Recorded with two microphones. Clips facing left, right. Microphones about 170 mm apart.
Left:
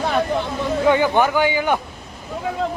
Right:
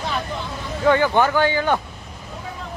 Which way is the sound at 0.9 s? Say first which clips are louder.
Even; 15° left (ahead or behind).